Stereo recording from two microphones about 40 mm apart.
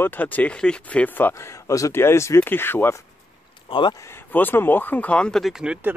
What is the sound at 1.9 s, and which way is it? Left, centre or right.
Speech, left.